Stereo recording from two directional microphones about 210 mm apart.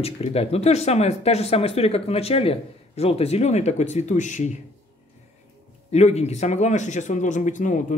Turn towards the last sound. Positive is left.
turn(degrees=35)  # may be behind; listen again after turning